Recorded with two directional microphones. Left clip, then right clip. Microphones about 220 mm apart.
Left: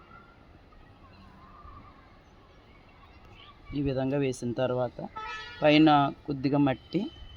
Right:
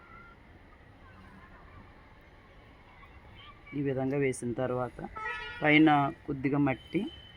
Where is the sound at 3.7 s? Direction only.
55° left (ahead or behind).